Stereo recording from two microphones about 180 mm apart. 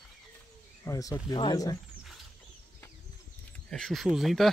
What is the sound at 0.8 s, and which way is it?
Speech, 20° left (ahead or behind).